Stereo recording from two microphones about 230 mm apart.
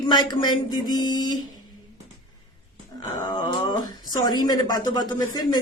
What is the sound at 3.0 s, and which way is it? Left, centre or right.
A woman's voice, left.